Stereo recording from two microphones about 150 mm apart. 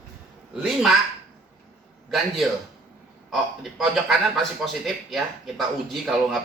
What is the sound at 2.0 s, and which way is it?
A man's voice, centre (ahead or behind).